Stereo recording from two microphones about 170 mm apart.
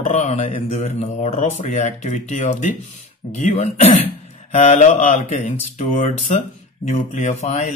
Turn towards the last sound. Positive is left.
turn(degrees=45)  # may be behind; listen again after turning